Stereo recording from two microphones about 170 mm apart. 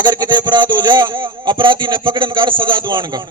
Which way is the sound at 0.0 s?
25° right (ahead or behind).